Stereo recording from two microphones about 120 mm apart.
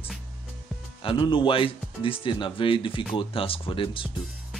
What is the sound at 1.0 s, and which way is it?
Speech, 45° left (ahead or behind).